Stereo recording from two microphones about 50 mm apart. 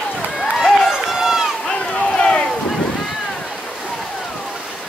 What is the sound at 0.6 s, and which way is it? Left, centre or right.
Run, centre.